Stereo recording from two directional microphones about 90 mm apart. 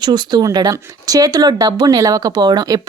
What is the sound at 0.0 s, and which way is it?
Speech, 55° right (ahead or behind).